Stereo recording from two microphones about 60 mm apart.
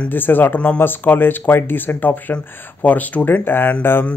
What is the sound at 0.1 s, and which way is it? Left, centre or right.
Speech, left.